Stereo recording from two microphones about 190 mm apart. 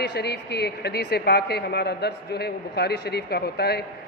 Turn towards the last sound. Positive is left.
turn(degrees=55)  # may be behind; listen again after turning